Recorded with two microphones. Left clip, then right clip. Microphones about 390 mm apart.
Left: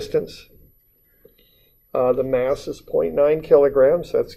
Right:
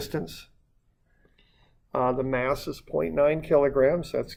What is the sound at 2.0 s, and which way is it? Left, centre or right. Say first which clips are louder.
Speech: left 7 dB; right.